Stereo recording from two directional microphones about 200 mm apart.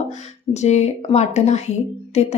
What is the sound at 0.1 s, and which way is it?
Speech, 35° left (ahead or behind).